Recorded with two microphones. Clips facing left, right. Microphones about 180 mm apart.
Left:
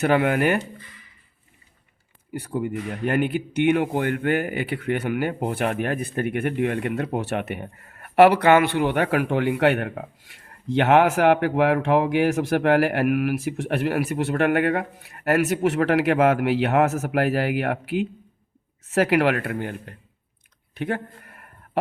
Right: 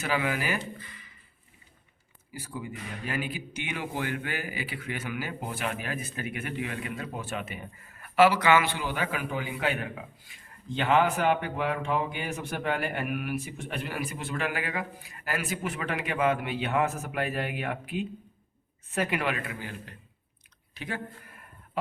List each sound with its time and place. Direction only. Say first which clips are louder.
0.0 s speech: left 10 dB; 60° left (ahead or behind)
2.3 s speech: left 11 dB; 65° left (ahead or behind)
20.7 s a sound: left 9 dB; 60° left (ahead or behind)